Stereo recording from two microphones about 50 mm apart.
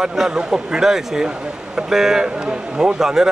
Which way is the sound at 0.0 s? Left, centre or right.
Centre.